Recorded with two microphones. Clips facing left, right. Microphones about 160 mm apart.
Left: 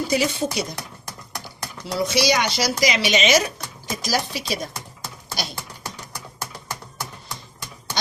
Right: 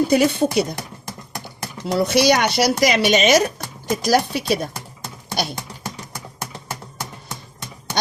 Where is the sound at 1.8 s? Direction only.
55° right (ahead or behind).